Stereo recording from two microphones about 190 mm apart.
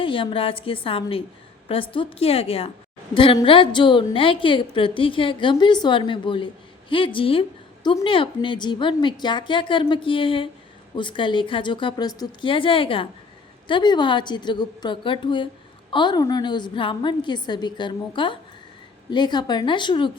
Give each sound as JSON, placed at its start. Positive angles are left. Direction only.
{"t": 0.0, "sound": "a woman's voice", "side_deg": 25}